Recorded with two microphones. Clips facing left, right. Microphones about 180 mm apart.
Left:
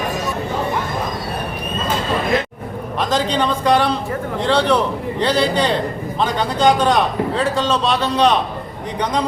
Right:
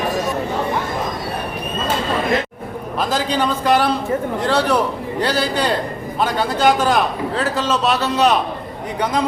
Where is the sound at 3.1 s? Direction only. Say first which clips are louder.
Left 1 dB; 10° right (ahead or behind).